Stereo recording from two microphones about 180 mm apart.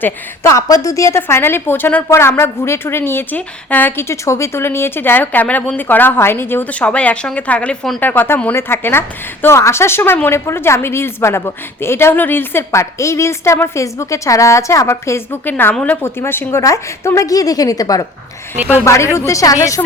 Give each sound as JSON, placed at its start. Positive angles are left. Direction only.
{"t": 0.0, "sound": "a woman's voice", "side_deg": 15}
{"t": 18.5, "sound": "speech", "side_deg": -10}
{"t": 18.9, "sound": "a woman's voice", "side_deg": 15}